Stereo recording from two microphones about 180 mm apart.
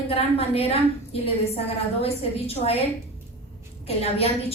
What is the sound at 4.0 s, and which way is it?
Speech, 35° left (ahead or behind).